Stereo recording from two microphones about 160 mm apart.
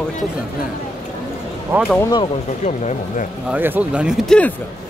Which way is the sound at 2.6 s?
50° left (ahead or behind).